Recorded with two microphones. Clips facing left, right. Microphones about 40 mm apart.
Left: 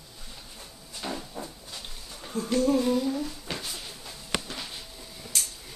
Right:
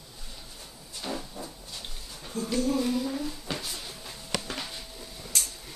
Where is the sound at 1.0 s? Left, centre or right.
Centre.